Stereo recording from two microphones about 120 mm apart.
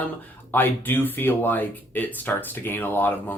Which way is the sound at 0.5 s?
15° left (ahead or behind).